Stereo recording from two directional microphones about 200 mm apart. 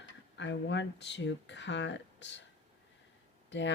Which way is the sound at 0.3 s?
65° left (ahead or behind).